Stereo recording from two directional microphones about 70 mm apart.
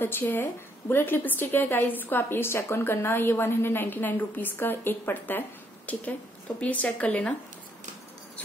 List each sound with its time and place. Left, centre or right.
0.0 s a woman's voice: left